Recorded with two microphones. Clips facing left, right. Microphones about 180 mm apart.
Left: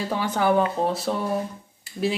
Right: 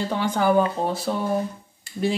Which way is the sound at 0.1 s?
5° left (ahead or behind).